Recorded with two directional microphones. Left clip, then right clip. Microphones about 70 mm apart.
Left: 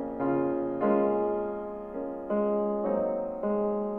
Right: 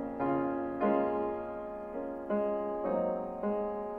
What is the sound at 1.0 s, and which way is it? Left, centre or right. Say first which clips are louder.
Music: left 6 dB; centre.